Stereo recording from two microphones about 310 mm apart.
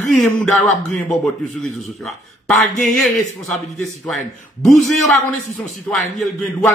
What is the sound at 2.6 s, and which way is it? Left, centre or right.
Speech, left.